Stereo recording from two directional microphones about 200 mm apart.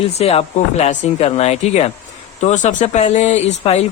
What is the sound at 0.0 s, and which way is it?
Speech, 30° left (ahead or behind).